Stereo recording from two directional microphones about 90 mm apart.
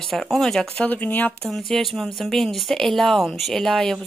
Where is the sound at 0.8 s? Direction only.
20° left (ahead or behind).